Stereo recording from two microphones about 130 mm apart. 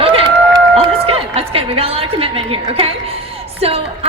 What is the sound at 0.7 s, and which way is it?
A woman's voice, 50° right (ahead or behind).